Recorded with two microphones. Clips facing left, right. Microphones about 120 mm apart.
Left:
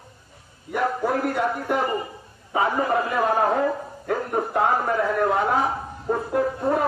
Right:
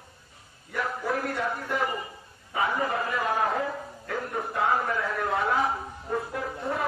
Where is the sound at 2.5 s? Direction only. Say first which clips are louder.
Left 6 dB; 30° left (ahead or behind).